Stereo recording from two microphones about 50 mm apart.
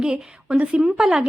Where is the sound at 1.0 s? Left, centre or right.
Centre.